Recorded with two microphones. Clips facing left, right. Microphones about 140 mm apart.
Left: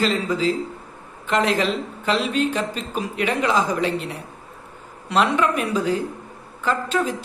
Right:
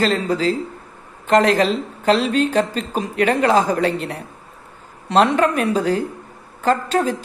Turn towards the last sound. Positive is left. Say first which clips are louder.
# right 4 dB
turn(degrees=-40)  # may be behind; listen again after turning